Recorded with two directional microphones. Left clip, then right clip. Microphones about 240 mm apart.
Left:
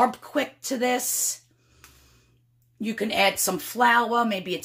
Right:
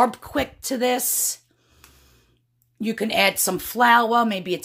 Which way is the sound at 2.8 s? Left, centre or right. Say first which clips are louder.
Right 2 dB; right.